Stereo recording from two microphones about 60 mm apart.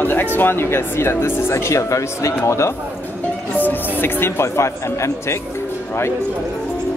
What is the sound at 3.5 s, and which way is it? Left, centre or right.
Speech, left.